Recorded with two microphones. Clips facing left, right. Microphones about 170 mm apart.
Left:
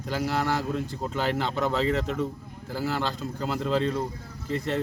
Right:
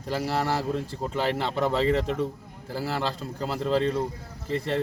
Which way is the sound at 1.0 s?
Centre (ahead or behind).